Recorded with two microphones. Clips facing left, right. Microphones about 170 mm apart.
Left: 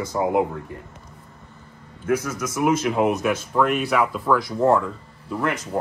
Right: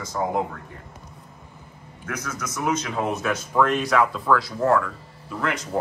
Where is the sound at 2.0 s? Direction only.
25° left (ahead or behind).